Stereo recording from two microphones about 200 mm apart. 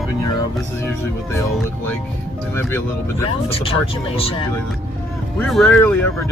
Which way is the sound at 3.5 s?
25° left (ahead or behind).